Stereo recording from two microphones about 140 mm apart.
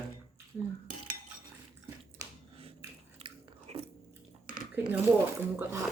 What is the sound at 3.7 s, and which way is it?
Chewing, 50° right (ahead or behind).